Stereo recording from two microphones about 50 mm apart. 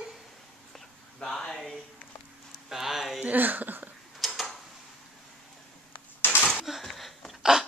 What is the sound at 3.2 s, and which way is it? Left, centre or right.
Speech, right.